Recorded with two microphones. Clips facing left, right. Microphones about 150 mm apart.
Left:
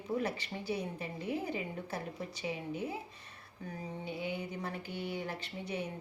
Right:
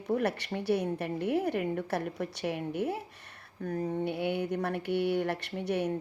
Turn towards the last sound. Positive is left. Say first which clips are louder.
# right 8 dB
turn(degrees=-75)  # may be behind; listen again after turning